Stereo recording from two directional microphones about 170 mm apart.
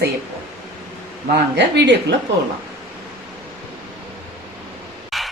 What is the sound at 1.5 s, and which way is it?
Speech, 90° right.